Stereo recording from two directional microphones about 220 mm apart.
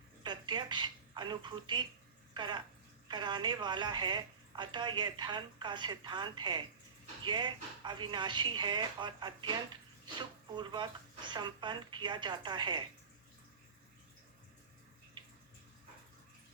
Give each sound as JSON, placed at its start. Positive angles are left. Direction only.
{"t": 0.2, "sound": "a woman's voice", "side_deg": -20}